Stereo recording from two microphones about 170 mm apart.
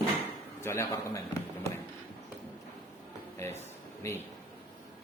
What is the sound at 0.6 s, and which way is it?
Speech, 15° left (ahead or behind).